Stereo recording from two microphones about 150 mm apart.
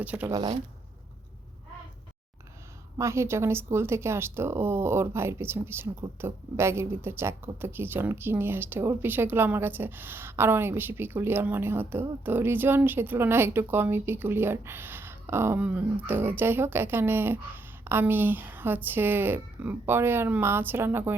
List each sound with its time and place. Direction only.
0.0 s speech: 10° right (ahead or behind)
0.3 s speech: 25° right (ahead or behind)
3.0 s speech: 20° right (ahead or behind)